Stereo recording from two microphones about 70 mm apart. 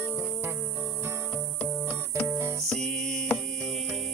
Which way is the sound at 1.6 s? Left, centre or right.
Left.